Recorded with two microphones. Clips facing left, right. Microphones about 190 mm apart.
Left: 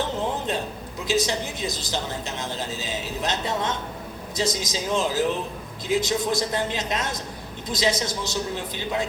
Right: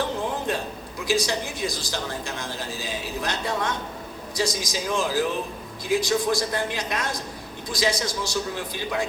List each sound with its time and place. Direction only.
1.0 s a man's voice: 20° left (ahead or behind)